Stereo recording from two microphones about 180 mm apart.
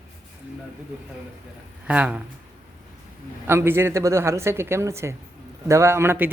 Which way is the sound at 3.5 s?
15° right (ahead or behind).